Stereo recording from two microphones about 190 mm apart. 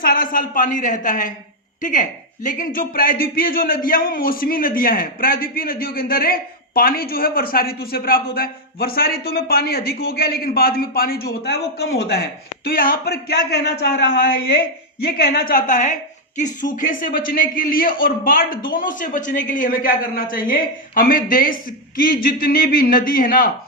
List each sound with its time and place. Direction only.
0.0 s a man's voice: 50° left (ahead or behind)
12.6 s a man's voice: 45° left (ahead or behind)
15.0 s a man's voice: 55° left (ahead or behind)